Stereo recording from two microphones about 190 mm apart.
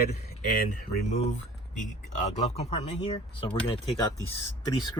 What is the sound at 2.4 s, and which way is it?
Speech, 35° left (ahead or behind).